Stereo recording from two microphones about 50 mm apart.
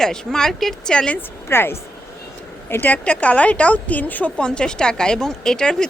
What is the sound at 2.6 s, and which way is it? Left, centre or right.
Speech, left.